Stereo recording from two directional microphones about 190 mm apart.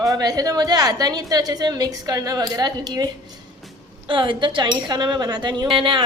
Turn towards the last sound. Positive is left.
turn(degrees=-25)  # may be behind; listen again after turning